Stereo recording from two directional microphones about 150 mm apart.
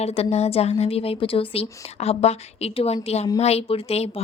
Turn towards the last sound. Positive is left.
turn(degrees=40)  # may be behind; listen again after turning